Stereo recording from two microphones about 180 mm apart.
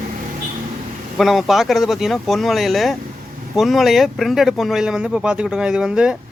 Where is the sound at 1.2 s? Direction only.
Centre (ahead or behind).